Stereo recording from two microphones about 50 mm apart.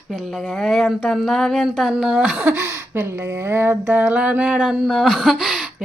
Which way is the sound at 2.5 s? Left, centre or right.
Right.